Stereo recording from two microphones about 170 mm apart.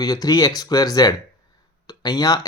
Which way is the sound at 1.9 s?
25° left (ahead or behind).